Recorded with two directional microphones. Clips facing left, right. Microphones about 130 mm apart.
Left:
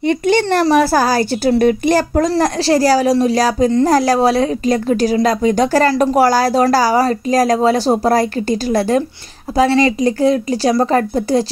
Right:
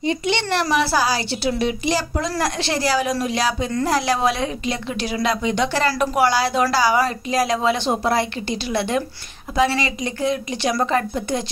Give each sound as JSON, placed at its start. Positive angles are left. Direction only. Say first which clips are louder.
{"t": 0.0, "sound": "speech", "louder": "left 8 dB", "side_deg": 50}
{"t": 2.4, "sound": "a woman's voice", "louder": "left 9 dB", "side_deg": 40}